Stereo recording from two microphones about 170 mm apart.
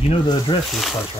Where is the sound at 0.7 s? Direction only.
Centre (ahead or behind).